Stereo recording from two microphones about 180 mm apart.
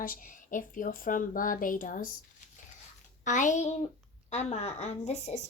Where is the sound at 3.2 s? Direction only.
45° left (ahead or behind).